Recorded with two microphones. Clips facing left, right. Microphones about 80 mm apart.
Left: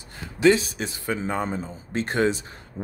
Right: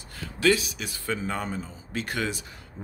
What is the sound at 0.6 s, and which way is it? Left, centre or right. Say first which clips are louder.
Speech: left 5 dB; left.